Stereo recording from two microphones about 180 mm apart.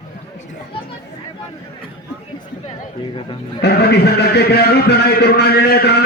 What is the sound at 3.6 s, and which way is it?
A man's voice, 65° left (ahead or behind).